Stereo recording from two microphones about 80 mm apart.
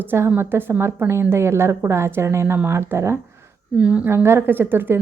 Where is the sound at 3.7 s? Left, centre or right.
Centre.